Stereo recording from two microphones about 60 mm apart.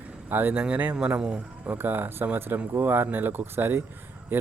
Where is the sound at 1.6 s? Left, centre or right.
Right.